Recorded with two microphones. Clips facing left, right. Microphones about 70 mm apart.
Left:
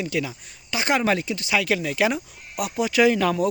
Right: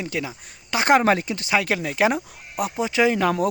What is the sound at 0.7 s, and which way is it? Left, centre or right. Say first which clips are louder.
Speech: right 4 dB; right.